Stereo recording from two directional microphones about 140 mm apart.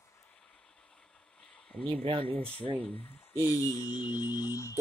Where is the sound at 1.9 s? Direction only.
40° right (ahead or behind).